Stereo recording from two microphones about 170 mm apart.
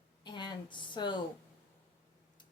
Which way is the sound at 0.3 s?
25° left (ahead or behind).